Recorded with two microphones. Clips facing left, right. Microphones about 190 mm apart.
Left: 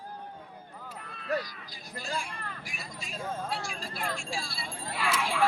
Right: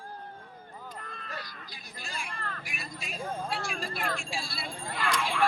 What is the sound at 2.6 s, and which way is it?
Vehicle, 60° right (ahead or behind).